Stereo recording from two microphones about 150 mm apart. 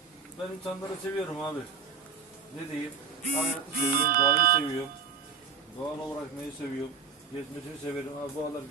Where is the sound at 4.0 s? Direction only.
75° right (ahead or behind).